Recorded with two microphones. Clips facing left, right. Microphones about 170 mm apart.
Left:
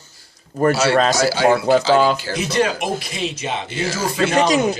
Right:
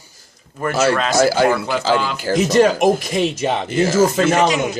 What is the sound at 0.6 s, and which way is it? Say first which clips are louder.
Speech: left 7 dB; 40° left (ahead or behind).